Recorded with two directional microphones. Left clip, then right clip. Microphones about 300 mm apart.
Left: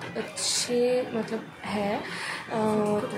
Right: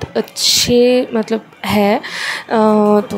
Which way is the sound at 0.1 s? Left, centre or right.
Right.